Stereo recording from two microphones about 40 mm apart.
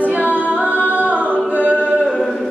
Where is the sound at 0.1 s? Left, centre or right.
Right.